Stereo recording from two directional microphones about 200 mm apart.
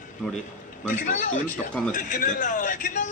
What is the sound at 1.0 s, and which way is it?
A man's voice, 40° left (ahead or behind).